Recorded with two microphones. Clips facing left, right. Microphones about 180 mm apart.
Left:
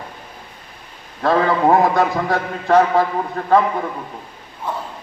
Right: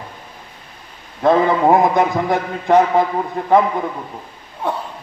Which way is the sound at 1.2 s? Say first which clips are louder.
Right 2 dB; 20° right (ahead or behind).